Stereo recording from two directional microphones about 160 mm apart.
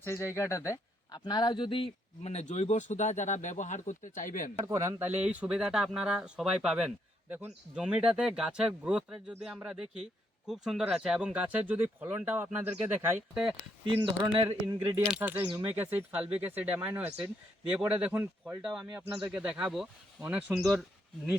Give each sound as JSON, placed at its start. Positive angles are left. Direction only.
{"t": 0.0, "sound": "speech", "side_deg": 15}
{"t": 4.5, "sound": "speech", "side_deg": -15}
{"t": 14.0, "sound": "speech", "side_deg": -30}
{"t": 14.4, "sound": "speech", "side_deg": -15}